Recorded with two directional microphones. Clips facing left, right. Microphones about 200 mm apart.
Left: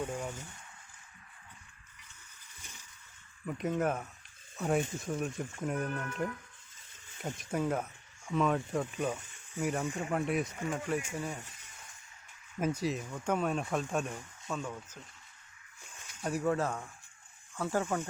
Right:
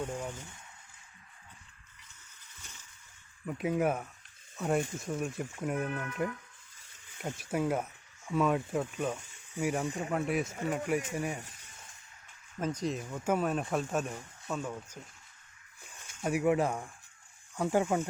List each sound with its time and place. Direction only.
0.2 s speech: 10° left (ahead or behind)
2.6 s splash: 15° left (ahead or behind)
3.4 s speech: 5° right (ahead or behind)
7.2 s speech: 5° right (ahead or behind)
10.7 s speech: 10° right (ahead or behind)
12.5 s speech: 10° left (ahead or behind); by 14.9 s 10° right (ahead or behind)
16.2 s speech: 10° right (ahead or behind)